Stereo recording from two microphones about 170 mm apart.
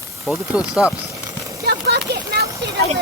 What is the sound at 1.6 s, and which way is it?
Speech, 75° right (ahead or behind).